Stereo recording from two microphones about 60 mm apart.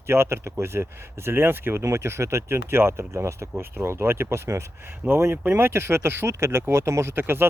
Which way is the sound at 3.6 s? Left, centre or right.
Right.